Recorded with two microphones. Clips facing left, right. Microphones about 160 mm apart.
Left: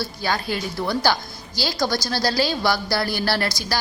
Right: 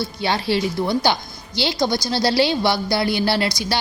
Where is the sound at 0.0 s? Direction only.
25° right (ahead or behind).